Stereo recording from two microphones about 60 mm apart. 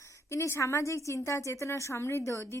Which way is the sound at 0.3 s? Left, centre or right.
Left.